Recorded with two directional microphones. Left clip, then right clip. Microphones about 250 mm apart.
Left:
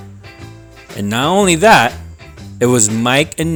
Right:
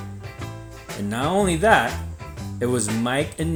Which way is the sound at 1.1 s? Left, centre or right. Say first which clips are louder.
Left 9 dB; left.